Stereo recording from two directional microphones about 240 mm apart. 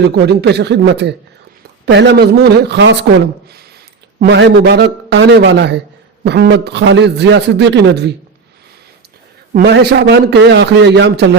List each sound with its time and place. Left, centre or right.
0.2 s speech: right
4.2 s speech: right
9.5 s speech: right